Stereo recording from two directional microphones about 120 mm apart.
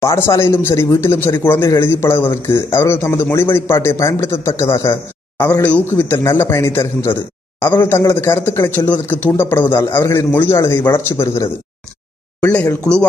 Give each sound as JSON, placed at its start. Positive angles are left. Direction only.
{"t": 0.0, "sound": "speech", "side_deg": 25}
{"t": 12.5, "sound": "speech", "side_deg": 10}